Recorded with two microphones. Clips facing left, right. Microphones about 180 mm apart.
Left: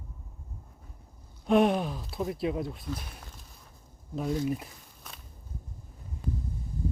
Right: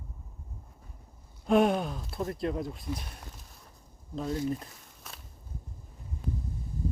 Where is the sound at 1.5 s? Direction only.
Centre (ahead or behind).